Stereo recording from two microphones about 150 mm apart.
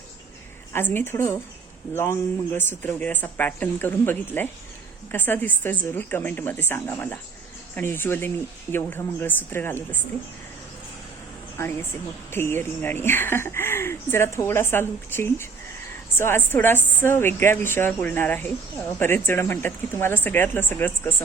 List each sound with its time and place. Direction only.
0.7 s a woman's voice: 15° left (ahead or behind)
11.5 s a woman's voice: 15° left (ahead or behind)